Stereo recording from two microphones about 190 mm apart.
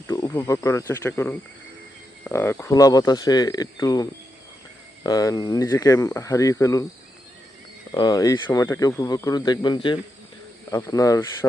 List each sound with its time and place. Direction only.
0.1 s speech: 20° left (ahead or behind)
7.9 s speech: 20° left (ahead or behind)
10.7 s speech: 15° left (ahead or behind)